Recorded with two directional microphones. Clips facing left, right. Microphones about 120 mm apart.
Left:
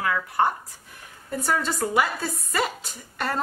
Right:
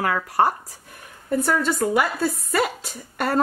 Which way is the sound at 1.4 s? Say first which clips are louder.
Right 3 dB; 55° right (ahead or behind).